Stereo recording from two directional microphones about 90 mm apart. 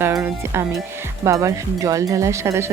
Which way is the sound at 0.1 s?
30° right (ahead or behind).